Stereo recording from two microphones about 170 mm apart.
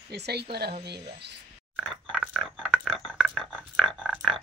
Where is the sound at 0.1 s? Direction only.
75° right (ahead or behind).